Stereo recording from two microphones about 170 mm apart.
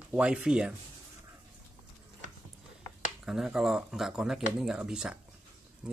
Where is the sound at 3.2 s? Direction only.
5° right (ahead or behind).